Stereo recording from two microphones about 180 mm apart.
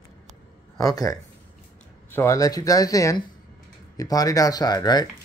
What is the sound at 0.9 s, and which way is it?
Speech, 20° left (ahead or behind).